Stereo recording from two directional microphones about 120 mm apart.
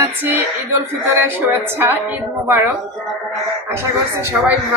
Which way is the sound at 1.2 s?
20° right (ahead or behind).